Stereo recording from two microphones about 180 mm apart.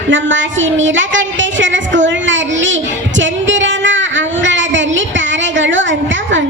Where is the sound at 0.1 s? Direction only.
90° right.